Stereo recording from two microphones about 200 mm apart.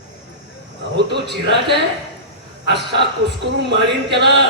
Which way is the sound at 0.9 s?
55° right (ahead or behind).